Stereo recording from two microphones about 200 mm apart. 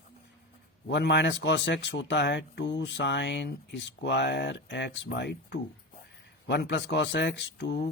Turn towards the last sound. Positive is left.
turn(degrees=60)  # may be behind; listen again after turning